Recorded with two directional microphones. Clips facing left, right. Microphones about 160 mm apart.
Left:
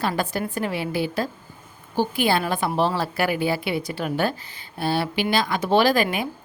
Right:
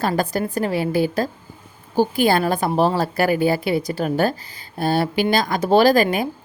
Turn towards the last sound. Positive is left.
turn(degrees=-40)  # may be behind; listen again after turning